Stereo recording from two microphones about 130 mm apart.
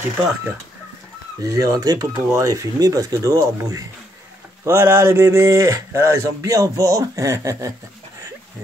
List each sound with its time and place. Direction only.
1.4 s speech: 25° right (ahead or behind)